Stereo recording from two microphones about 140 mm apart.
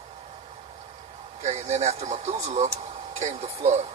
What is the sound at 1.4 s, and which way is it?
Speech, 55° right (ahead or behind).